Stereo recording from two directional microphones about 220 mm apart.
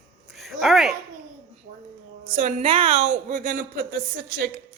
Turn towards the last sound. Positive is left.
turn(degrees=-45)  # may be behind; listen again after turning